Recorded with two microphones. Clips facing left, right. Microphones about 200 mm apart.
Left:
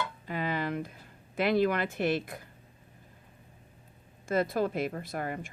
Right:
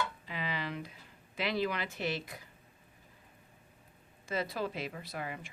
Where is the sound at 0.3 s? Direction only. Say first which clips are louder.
Left 7 dB; 50° left (ahead or behind).